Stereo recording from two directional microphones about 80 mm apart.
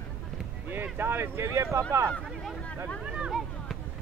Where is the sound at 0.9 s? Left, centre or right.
Right.